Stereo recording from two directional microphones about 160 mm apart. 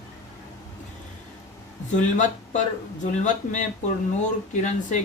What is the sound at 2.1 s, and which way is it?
Speech, 50° left (ahead or behind).